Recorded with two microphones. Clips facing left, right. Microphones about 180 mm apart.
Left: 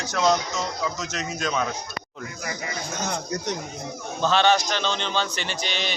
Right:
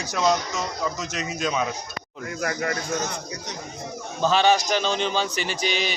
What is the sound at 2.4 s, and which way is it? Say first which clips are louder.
Speech: right 7 dB; 60° right (ahead or behind).